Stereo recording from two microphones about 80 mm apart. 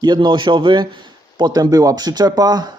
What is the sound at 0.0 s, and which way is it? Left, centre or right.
Speech, right.